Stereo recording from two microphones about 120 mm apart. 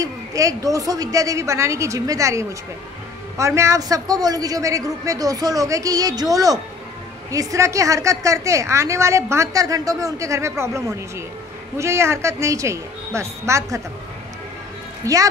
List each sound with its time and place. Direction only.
0.0 s a sound: 30° right (ahead or behind)
0.7 s a woman's voice: 30° right (ahead or behind)
15.0 s a woman's voice: 25° right (ahead or behind)